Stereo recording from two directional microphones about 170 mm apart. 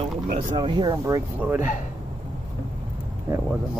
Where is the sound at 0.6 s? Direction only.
30° right (ahead or behind); by 1.7 s 10° right (ahead or behind).